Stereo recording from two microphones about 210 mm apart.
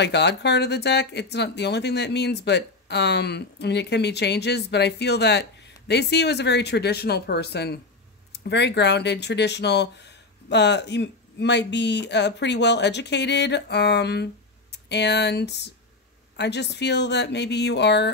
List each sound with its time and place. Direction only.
0.0 s speech: 55° left (ahead or behind)